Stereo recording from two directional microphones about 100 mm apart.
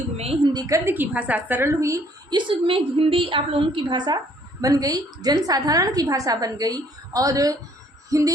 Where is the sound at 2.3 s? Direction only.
55° right (ahead or behind).